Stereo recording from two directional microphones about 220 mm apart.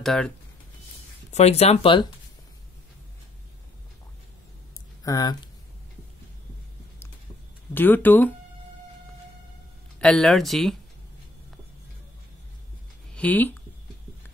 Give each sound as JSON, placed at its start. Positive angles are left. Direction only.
{"t": 0.0, "sound": "speech", "side_deg": 0}
{"t": 1.3, "sound": "speech", "side_deg": 30}
{"t": 5.0, "sound": "speech", "side_deg": 15}
{"t": 7.7, "sound": "speech", "side_deg": 10}
{"t": 9.9, "sound": "speech", "side_deg": 5}
{"t": 13.1, "sound": "speech", "side_deg": 5}